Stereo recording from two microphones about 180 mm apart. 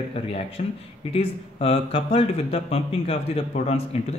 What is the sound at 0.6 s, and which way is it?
Speech, 40° left (ahead or behind).